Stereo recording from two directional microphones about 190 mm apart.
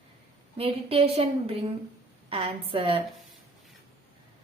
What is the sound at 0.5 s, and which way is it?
A woman's voice, 30° right (ahead or behind).